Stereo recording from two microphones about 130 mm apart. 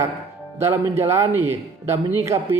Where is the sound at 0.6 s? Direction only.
20° right (ahead or behind).